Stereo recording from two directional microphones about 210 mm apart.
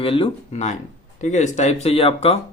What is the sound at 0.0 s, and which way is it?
Speech, 25° left (ahead or behind).